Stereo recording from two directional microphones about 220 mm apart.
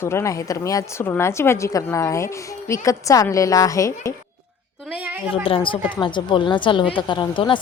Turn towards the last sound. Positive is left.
turn(degrees=20)  # may be behind; listen again after turning